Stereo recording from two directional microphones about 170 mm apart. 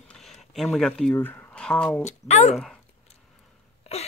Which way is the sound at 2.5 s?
Centre (ahead or behind).